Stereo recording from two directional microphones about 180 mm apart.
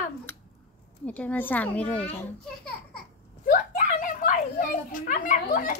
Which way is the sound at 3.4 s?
45° left (ahead or behind).